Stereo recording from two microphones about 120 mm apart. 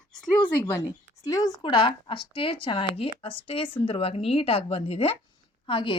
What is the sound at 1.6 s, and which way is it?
A woman's voice, 45° left (ahead or behind).